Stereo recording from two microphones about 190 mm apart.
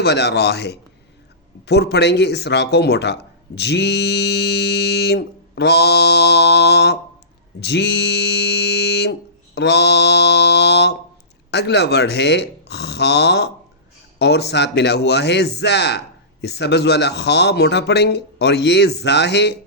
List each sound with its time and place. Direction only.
0.0 s speech: 60° left (ahead or behind)
9.6 s mantra: 60° left (ahead or behind)
11.5 s speech: 60° left (ahead or behind)